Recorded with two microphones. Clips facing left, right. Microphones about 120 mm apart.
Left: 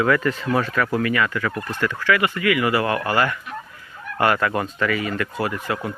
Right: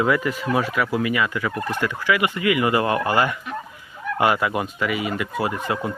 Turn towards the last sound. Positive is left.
turn(degrees=-20)  # may be behind; listen again after turning